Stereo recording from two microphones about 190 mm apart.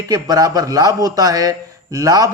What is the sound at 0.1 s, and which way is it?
A man's voice, 20° right (ahead or behind).